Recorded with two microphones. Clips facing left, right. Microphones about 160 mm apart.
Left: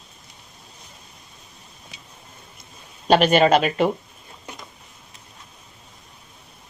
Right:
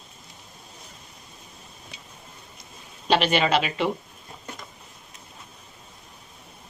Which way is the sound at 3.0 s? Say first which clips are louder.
Left 6 dB; 45° left (ahead or behind).